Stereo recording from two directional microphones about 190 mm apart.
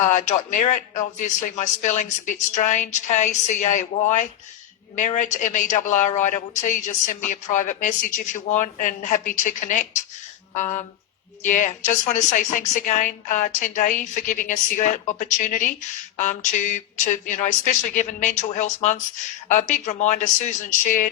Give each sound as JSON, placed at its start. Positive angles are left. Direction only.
{"t": 0.1, "sound": "speech", "side_deg": 40}